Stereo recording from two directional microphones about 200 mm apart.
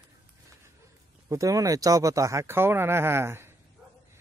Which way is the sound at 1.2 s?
15° right (ahead or behind).